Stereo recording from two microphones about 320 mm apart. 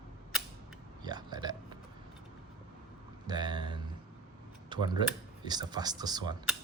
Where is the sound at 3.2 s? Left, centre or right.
Centre.